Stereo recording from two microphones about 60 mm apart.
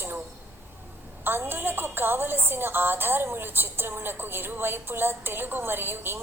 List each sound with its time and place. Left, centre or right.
1.2 s a woman's voice: right